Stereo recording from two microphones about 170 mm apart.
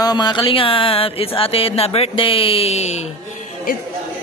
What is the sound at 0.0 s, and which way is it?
Speech, 25° left (ahead or behind).